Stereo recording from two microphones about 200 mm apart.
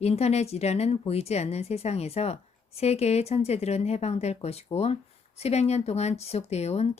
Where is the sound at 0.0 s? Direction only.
30° left (ahead or behind).